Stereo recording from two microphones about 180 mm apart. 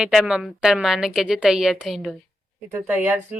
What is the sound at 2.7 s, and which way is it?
Speech, 10° right (ahead or behind).